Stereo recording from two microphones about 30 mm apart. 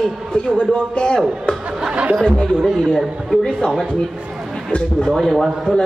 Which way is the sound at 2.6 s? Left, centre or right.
Centre.